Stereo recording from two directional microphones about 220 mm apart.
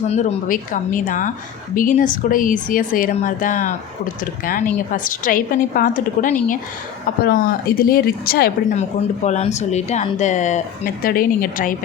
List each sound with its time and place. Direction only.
0.1 s speech: 30° left (ahead or behind)
8.7 s speech: 30° left (ahead or behind)